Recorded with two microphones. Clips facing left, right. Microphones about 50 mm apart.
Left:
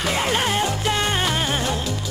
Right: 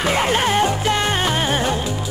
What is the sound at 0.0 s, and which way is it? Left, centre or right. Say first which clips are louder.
Music: right 4 dB; centre.